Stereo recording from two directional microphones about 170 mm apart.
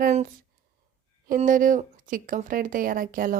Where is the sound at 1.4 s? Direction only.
50° right (ahead or behind).